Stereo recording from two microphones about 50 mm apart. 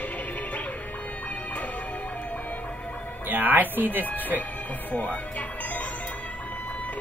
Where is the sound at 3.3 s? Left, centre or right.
Right.